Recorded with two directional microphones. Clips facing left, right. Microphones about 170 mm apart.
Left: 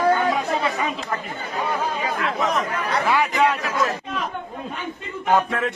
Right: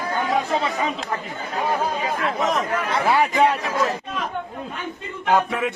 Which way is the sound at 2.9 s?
30° right (ahead or behind).